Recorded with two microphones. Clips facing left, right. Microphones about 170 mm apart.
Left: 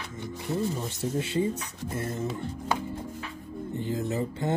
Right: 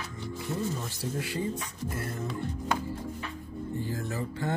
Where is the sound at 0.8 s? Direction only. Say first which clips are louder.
Left 4 dB; 20° left (ahead or behind).